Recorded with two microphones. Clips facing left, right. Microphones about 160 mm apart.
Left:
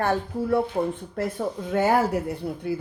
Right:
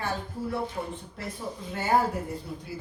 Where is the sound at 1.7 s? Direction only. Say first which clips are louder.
Left 4 dB; 75° left (ahead or behind).